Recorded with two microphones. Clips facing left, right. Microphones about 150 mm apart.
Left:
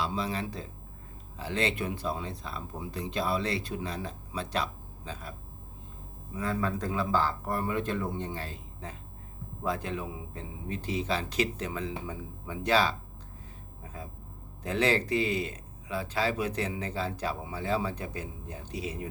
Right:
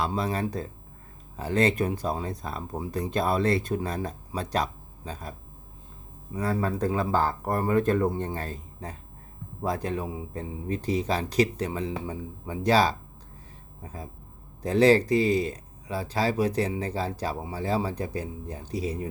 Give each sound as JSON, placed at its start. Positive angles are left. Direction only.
{"t": 0.0, "sound": "speech", "side_deg": -50}
{"t": 6.3, "sound": "speech", "side_deg": -40}